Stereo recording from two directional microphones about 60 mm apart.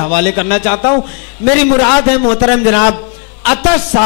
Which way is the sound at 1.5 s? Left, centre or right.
Left.